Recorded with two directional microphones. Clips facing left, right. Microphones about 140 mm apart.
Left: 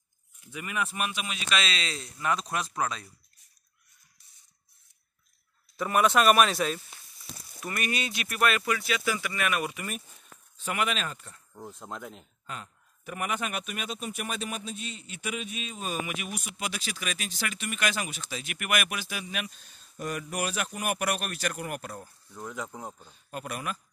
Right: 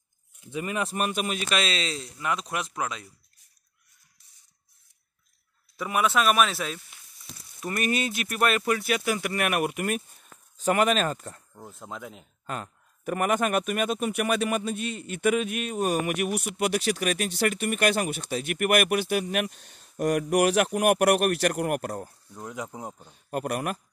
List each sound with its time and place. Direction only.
0.4 s speech: 25° right (ahead or behind)
2.5 s speech: 30° left (ahead or behind)
2.8 s speech: 15° right (ahead or behind)
5.8 s speech: 5° right (ahead or behind)
7.6 s speech: 40° right (ahead or behind)
8.8 s a man's voice: 55° right (ahead or behind)
10.6 s speech: 40° right (ahead or behind)
11.5 s speech: centre (ahead or behind)
12.4 s a man's voice: 50° right (ahead or behind)
22.3 s speech: 10° right (ahead or behind)
23.1 s a man's voice: 55° right (ahead or behind)